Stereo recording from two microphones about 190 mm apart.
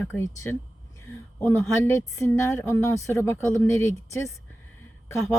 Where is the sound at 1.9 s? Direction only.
15° left (ahead or behind).